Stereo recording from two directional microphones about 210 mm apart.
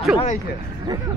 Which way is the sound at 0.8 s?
15° right (ahead or behind).